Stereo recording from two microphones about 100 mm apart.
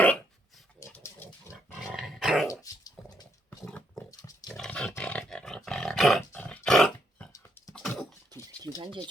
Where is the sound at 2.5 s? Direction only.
35° left (ahead or behind).